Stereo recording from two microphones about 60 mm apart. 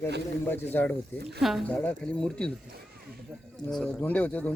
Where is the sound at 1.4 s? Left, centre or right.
Centre.